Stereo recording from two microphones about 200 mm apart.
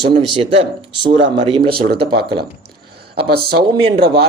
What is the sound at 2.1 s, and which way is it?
Speech, 55° right (ahead or behind).